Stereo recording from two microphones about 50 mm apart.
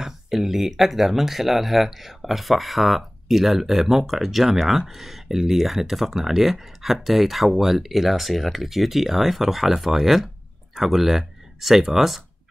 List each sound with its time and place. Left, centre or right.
0.0 s speech: centre